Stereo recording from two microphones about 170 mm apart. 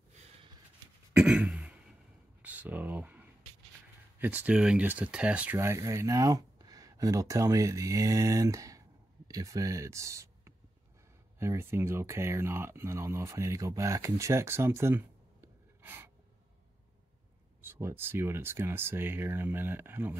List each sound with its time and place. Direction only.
1.1 s throat clearing: 5° right (ahead or behind)
2.4 s a sound: 10° right (ahead or behind)
4.2 s speech: 10° right (ahead or behind)
17.6 s speech: 15° right (ahead or behind)